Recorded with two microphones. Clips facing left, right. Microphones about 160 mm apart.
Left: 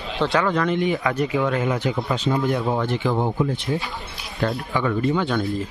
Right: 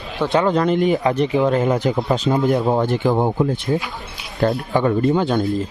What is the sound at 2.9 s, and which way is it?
Speech, 45° right (ahead or behind).